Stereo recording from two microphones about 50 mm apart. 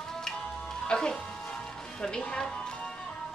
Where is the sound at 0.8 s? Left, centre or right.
Centre.